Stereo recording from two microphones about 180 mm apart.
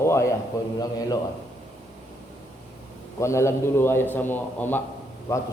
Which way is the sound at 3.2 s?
15° left (ahead or behind).